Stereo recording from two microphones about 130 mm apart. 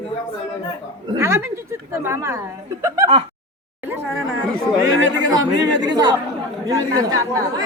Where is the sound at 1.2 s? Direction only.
20° right (ahead or behind).